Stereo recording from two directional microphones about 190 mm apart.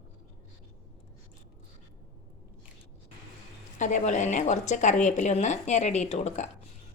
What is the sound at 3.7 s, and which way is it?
A woman's voice, 40° left (ahead or behind).